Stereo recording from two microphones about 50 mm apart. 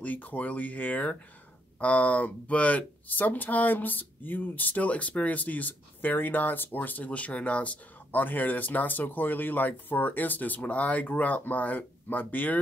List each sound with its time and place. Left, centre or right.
0.0 s speech: left